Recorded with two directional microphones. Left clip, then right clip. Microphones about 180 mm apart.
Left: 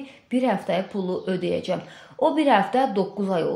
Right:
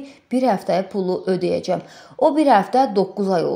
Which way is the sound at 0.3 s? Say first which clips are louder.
Right 5 dB; 40° right (ahead or behind).